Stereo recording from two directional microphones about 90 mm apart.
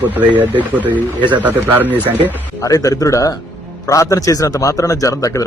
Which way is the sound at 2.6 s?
40° left (ahead or behind).